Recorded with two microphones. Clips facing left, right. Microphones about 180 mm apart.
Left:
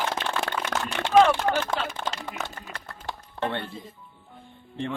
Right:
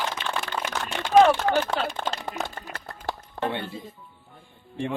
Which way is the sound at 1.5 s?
35° right (ahead or behind).